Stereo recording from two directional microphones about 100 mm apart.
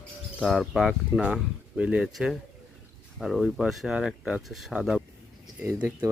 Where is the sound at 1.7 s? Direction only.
10° right (ahead or behind).